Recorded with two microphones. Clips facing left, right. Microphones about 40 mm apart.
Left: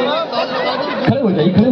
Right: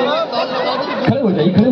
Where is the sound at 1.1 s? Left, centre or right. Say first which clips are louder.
Even; centre.